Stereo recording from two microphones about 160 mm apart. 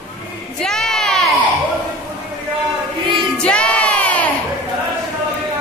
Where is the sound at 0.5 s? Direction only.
5° left (ahead or behind).